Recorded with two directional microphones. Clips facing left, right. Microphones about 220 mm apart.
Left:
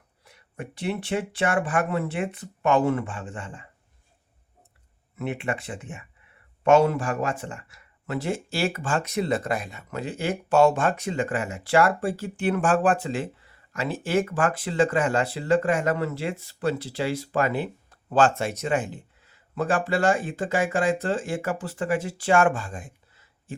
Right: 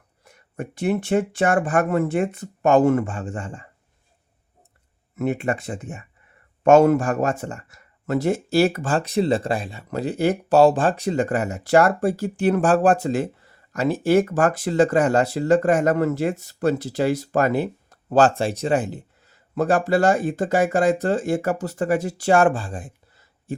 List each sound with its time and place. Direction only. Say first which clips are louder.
0.3 s speech: right 5 dB; 45° right (ahead or behind)
5.1 s speech: right 6 dB; 45° right (ahead or behind)